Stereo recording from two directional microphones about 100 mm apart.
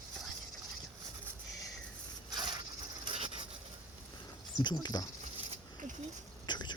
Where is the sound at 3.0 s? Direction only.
65° right (ahead or behind).